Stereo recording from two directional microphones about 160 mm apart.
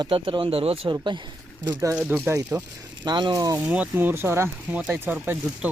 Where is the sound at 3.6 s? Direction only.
10° right (ahead or behind).